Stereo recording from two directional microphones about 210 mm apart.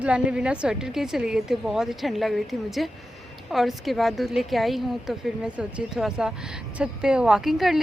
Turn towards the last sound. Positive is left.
turn(degrees=0)  # may be behind; listen again after turning